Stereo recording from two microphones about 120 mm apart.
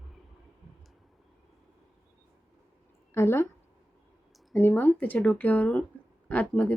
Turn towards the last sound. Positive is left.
turn(degrees=10)  # may be behind; listen again after turning